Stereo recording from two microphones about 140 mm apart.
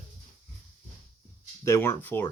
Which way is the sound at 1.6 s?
20° left (ahead or behind).